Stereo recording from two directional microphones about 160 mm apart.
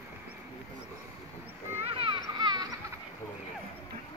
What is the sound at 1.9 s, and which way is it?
Children playing, 30° right (ahead or behind).